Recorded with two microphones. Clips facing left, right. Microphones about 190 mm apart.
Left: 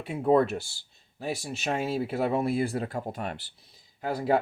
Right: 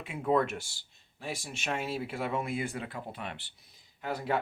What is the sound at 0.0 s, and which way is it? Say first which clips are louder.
Speech: left 6 dB; 35° left (ahead or behind).